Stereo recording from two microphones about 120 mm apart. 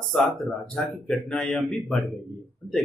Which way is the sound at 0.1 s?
Centre (ahead or behind).